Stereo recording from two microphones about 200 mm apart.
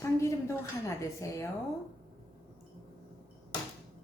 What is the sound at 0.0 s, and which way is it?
A woman's voice, 15° left (ahead or behind).